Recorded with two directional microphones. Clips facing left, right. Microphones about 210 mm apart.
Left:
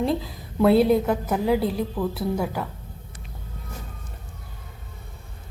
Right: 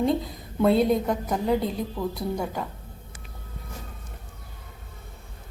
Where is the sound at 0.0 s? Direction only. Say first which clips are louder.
Even; centre (ahead or behind).